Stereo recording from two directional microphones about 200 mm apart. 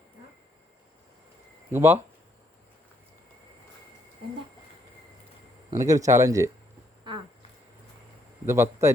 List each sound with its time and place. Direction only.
1.7 s speech: 10° right (ahead or behind)
5.7 s speech: 15° right (ahead or behind)
8.4 s speech: 15° right (ahead or behind)